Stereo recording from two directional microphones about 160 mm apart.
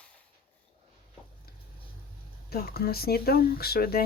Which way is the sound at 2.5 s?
75° left (ahead or behind).